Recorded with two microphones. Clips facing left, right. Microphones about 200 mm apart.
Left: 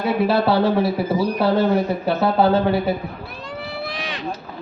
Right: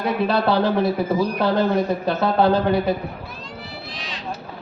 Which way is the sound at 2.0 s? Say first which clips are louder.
Left 2 dB; 5° left (ahead or behind).